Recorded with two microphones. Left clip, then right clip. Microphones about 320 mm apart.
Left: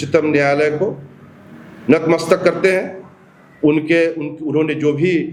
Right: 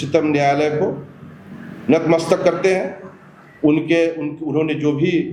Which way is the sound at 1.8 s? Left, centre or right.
Left.